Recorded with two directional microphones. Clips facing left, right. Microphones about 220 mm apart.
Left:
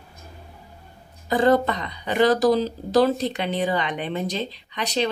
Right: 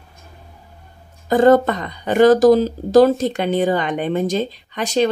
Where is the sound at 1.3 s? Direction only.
45° right (ahead or behind).